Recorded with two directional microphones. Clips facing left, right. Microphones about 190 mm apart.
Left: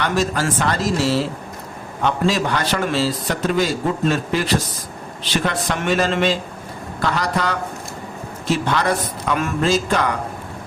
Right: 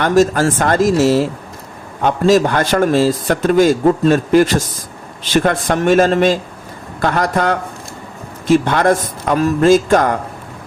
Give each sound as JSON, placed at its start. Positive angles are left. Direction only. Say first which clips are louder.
{"t": 0.0, "sound": "a man's voice", "louder": "right 8 dB", "side_deg": -45}
{"t": 9.6, "sound": "a man's voice", "louder": "right 8 dB", "side_deg": -50}